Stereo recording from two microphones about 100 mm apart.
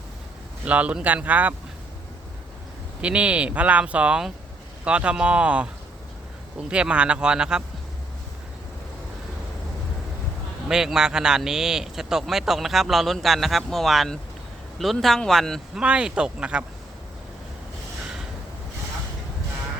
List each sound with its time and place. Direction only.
0.6 s speech: 15° right (ahead or behind)
3.0 s speech: 10° right (ahead or behind)
6.7 s speech: 10° right (ahead or behind)
10.7 s a man's voice: 5° right (ahead or behind)
15.8 s speech: 10° right (ahead or behind)